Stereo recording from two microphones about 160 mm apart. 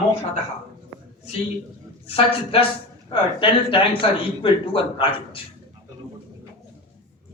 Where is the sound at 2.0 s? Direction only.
35° left (ahead or behind).